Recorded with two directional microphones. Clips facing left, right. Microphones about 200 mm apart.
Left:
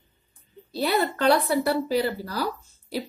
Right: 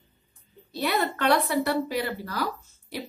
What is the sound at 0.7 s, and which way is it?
A woman's voice, 30° left (ahead or behind).